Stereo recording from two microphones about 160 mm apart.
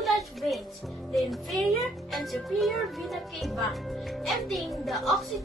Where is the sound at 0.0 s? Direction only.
Centre (ahead or behind).